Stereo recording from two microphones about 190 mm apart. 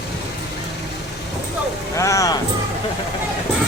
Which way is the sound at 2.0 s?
15° left (ahead or behind).